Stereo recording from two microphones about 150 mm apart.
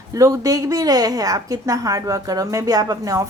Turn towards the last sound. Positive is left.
turn(degrees=-25)  # may be behind; listen again after turning